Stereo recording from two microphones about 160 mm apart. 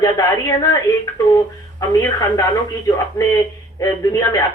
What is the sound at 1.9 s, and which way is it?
A man's voice, 20° left (ahead or behind).